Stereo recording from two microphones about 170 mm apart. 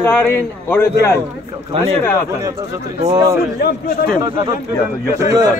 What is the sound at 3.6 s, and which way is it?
Speech, 65° left (ahead or behind).